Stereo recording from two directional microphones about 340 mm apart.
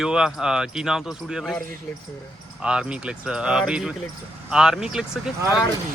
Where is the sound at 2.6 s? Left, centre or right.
Centre.